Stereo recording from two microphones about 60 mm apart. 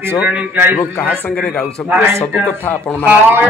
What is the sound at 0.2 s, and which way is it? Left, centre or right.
Speech, right.